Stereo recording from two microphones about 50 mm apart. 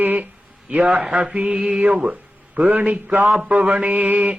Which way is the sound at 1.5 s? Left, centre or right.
Centre.